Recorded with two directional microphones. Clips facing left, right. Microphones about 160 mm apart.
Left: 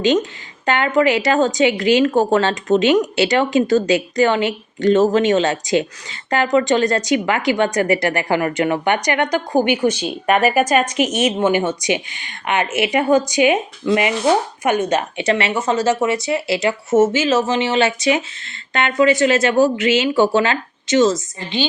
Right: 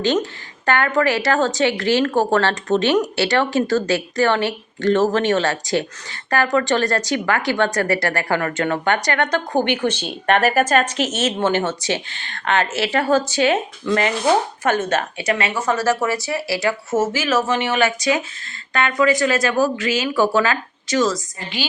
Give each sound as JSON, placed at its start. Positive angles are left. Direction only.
{"t": 0.0, "sound": "speech", "side_deg": 20}
{"t": 15.2, "sound": "speech", "side_deg": 30}